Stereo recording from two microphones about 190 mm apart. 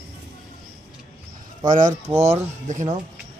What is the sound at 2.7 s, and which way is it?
Speech, 40° right (ahead or behind).